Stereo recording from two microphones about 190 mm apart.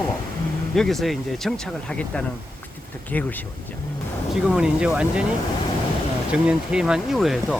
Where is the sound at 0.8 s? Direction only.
Centre (ahead or behind).